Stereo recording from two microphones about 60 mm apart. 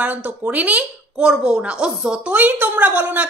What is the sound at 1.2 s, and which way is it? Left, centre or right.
A woman's voice, centre.